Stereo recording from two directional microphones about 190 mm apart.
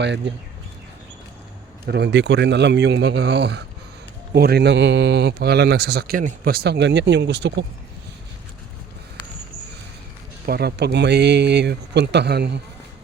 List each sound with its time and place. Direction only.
0.0 s speech: 65° right (ahead or behind)
1.9 s a man's voice: 65° right (ahead or behind)
10.4 s a man's voice: 55° right (ahead or behind)